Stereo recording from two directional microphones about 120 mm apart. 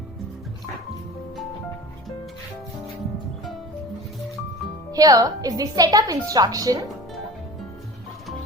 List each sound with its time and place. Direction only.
4.9 s a woman's voice: 30° right (ahead or behind)